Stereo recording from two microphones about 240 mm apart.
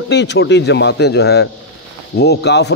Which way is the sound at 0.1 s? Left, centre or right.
Left.